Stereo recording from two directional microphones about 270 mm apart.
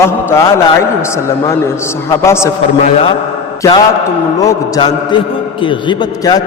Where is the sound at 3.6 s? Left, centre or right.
Centre.